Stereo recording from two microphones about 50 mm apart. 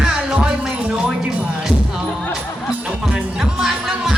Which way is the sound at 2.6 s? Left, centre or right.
Centre.